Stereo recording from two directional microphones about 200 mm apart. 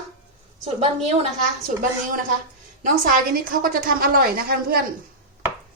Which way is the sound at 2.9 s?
45° right (ahead or behind).